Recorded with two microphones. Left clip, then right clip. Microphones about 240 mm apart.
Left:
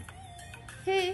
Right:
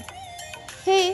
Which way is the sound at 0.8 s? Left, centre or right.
Right.